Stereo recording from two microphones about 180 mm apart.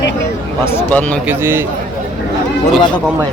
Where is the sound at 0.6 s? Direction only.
15° left (ahead or behind).